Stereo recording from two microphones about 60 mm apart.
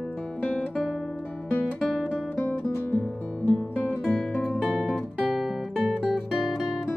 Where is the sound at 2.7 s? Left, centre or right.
Left.